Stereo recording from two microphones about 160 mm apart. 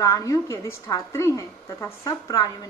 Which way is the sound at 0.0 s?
20° left (ahead or behind).